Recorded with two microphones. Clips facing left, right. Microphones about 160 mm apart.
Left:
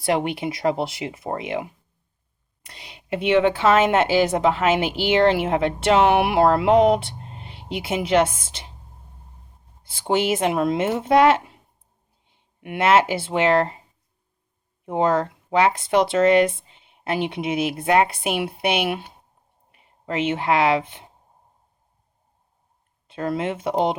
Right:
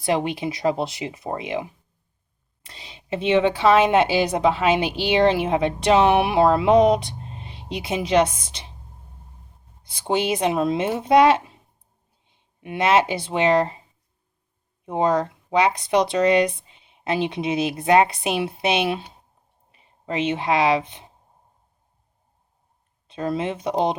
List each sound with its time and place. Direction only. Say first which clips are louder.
0.0 s a woman's voice: even; 20° right (ahead or behind)
2.6 s a sound: even; 25° right (ahead or behind)
3.2 s a woman's voice: even; 20° right (ahead or behind)
9.9 s a woman's voice: left 1 dB; 15° right (ahead or behind)
14.8 s a woman's voice: even; 20° right (ahead or behind)
23.0 s a woman's voice: even; 20° right (ahead or behind)